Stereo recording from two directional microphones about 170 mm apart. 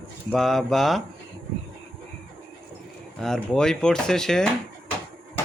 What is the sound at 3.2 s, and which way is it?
Speech, 5° left (ahead or behind).